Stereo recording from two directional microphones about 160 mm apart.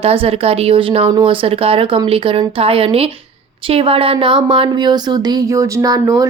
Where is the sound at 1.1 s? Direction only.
25° right (ahead or behind).